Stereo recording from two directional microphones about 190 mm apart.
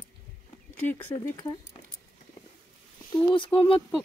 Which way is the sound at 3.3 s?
25° left (ahead or behind).